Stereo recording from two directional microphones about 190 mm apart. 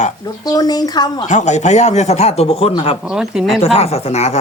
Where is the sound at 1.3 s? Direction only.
40° left (ahead or behind).